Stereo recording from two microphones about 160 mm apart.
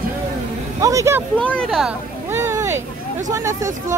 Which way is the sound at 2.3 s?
15° right (ahead or behind).